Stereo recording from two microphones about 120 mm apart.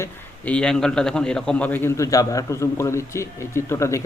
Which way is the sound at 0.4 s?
10° left (ahead or behind).